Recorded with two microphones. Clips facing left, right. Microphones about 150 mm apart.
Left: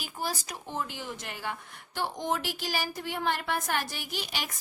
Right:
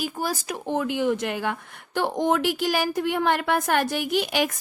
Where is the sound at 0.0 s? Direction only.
45° right (ahead or behind).